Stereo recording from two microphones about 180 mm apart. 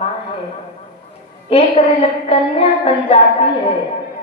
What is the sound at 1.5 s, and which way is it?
A woman's voice, 35° left (ahead or behind).